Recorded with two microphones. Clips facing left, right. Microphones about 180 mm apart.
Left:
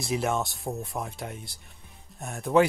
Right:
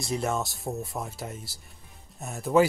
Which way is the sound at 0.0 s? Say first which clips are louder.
Left 1 dB; centre (ahead or behind).